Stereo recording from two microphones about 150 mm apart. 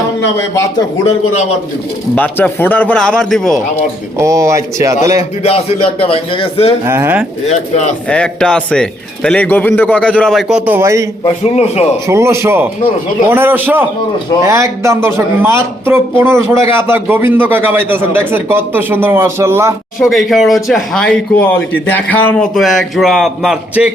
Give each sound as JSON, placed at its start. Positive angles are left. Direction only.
{"t": 2.1, "sound": "speech", "side_deg": 10}
{"t": 4.2, "sound": "speech", "side_deg": -20}
{"t": 5.4, "sound": "a man's voice", "side_deg": 45}
{"t": 6.8, "sound": "a man's voice", "side_deg": -15}
{"t": 7.4, "sound": "a man's voice", "side_deg": 50}
{"t": 8.1, "sound": "speech", "side_deg": 5}
{"t": 10.5, "sound": "a man's voice", "side_deg": -15}
{"t": 11.3, "sound": "a man's voice", "side_deg": 45}
{"t": 12.0, "sound": "a man's voice", "side_deg": -20}
{"t": 20.0, "sound": "a man's voice", "side_deg": 0}